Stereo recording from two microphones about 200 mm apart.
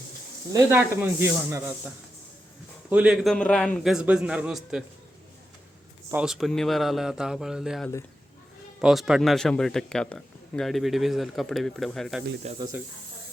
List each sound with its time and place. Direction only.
0.5 s speech: 10° right (ahead or behind)
2.9 s a man's voice: 5° right (ahead or behind)
6.1 s a man's voice: 5° right (ahead or behind)
12.5 s speech: 20° right (ahead or behind)